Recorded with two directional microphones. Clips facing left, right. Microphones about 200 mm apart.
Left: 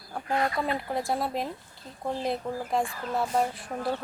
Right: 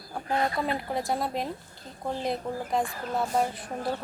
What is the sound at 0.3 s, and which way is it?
Speech, 30° right (ahead or behind).